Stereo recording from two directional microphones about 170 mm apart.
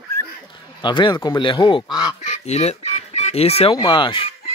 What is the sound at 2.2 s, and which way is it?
Chicken, 40° left (ahead or behind).